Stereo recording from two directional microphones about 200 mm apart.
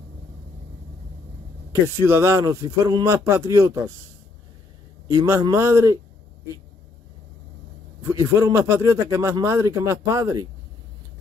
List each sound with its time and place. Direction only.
2.0 s speech: 15° right (ahead or behind)
5.0 s speech: 20° right (ahead or behind)
8.0 s speech: 15° right (ahead or behind)